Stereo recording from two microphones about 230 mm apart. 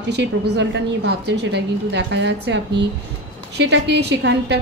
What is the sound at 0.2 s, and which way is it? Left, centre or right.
A woman's voice, right.